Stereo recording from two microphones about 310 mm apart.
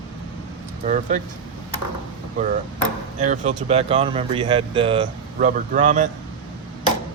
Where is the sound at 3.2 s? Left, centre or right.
Right.